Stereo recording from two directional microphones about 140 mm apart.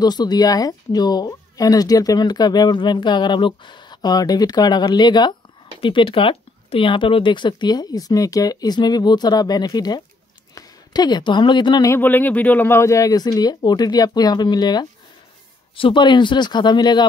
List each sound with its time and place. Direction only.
0.0 s speech: 30° left (ahead or behind)
11.9 s speech: 15° left (ahead or behind); by 17.1 s 30° left (ahead or behind)